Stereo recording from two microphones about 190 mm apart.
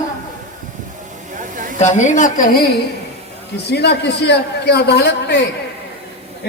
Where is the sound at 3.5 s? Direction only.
60° left (ahead or behind).